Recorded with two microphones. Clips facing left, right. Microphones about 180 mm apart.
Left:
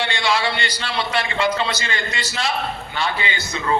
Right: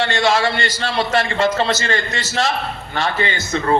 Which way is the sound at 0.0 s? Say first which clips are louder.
Right 5 dB; 45° right (ahead or behind).